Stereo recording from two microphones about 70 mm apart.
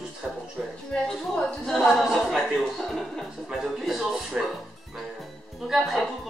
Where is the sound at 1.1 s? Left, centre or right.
Centre.